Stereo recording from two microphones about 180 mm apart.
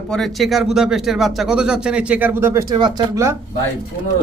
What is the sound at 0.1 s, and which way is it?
Speech, centre (ahead or behind).